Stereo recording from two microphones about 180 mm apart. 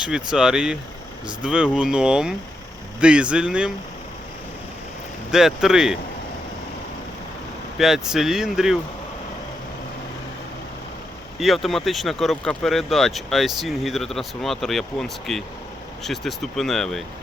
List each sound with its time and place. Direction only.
0.0 s speech: 5° right (ahead or behind)
5.3 s speech: 5° right (ahead or behind)
7.8 s speech: centre (ahead or behind)
11.3 s speech: centre (ahead or behind)